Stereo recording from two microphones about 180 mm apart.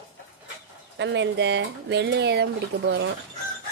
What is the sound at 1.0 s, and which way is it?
Speech, 80° right.